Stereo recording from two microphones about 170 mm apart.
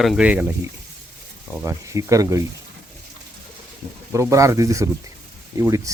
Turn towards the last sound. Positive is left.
turn(degrees=-20)  # may be behind; listen again after turning